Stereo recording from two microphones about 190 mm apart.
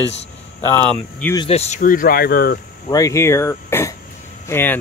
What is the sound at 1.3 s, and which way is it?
Speech, 30° left (ahead or behind).